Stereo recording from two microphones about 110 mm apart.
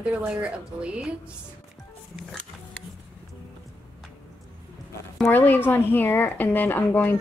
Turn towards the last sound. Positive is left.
turn(degrees=20)  # may be behind; listen again after turning